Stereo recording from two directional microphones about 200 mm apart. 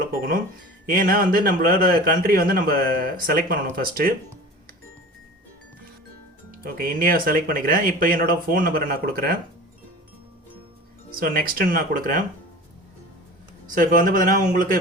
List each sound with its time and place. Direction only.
0.9 s a man's voice: 45° right (ahead or behind)
6.5 s a man's voice: 45° right (ahead or behind)
11.2 s a man's voice: 45° right (ahead or behind)
13.7 s a man's voice: 45° right (ahead or behind)